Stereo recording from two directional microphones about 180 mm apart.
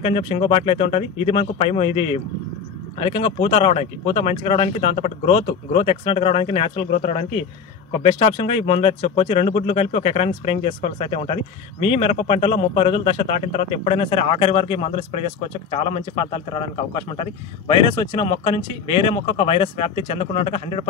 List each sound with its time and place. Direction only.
0.0 s a man's voice: 30° left (ahead or behind)